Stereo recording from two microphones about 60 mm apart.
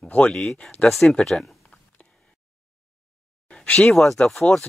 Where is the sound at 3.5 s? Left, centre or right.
Centre.